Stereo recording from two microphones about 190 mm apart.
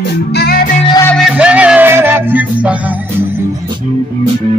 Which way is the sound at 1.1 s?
5° right (ahead or behind).